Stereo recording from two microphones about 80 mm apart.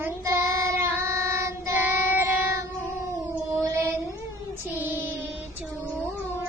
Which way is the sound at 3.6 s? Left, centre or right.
Right.